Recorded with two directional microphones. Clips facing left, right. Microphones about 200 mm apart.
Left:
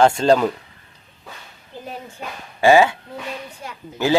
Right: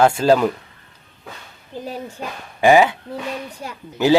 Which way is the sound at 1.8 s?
35° right (ahead or behind).